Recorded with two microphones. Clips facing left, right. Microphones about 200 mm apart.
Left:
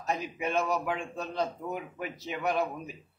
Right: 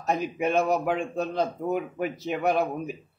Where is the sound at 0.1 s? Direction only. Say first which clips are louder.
Right 6 dB; 55° right (ahead or behind).